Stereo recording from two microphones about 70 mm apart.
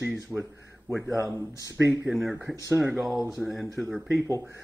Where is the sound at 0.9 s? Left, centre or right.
Right.